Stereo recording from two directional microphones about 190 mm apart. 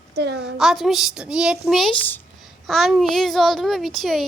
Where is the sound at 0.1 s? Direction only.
60° right (ahead or behind).